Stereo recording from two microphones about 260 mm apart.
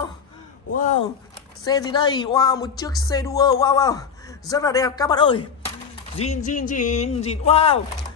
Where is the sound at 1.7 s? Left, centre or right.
Centre.